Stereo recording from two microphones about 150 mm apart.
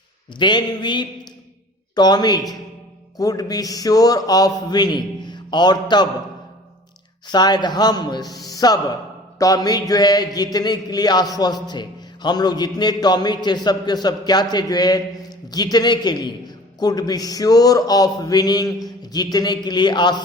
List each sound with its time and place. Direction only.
0.3 s mantra: 30° left (ahead or behind)
2.0 s speech: 30° left (ahead or behind)
7.3 s speech: 30° left (ahead or behind)